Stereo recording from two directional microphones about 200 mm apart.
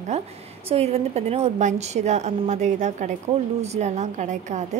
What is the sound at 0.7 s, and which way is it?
Speech, 30° right (ahead or behind).